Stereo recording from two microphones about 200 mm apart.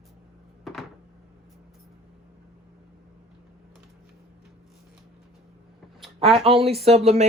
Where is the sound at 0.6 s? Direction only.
Centre (ahead or behind).